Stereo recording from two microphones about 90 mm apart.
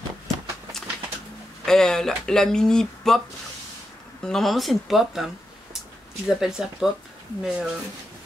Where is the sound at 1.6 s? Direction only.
5° left (ahead or behind).